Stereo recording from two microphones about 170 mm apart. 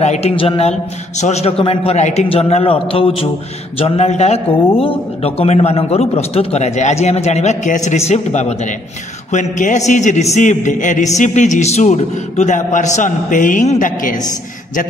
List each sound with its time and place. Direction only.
0.0 s a man's voice: 40° left (ahead or behind)